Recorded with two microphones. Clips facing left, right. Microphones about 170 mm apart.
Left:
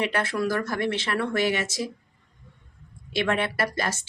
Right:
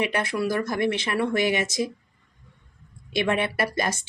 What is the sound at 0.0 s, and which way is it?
Speech, 15° right (ahead or behind).